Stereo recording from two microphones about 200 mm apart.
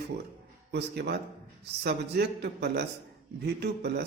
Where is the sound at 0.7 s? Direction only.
55° right (ahead or behind).